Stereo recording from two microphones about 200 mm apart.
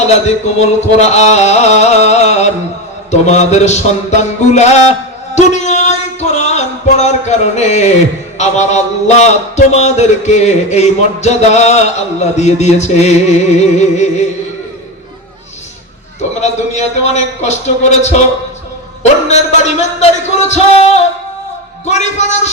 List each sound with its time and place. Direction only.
0.3 s a man's voice: 35° left (ahead or behind)
3.1 s music: 35° left (ahead or behind)
8.4 s a man's voice: 35° left (ahead or behind)
16.4 s a man's voice: 35° left (ahead or behind)
19.3 s a man's voice: 35° left (ahead or behind)